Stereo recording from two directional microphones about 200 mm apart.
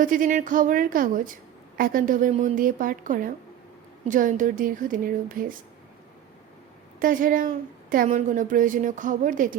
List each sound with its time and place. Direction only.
0.0 s a woman's voice: 40° right (ahead or behind)
7.0 s speech: 45° right (ahead or behind)